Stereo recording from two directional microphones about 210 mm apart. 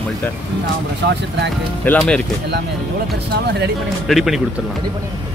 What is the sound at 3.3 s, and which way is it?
Speech, 50° right (ahead or behind).